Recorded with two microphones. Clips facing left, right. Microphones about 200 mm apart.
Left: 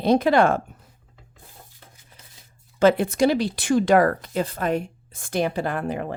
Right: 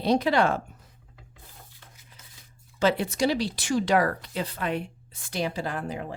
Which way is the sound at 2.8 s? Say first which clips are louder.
Left 6 dB; 50° left (ahead or behind).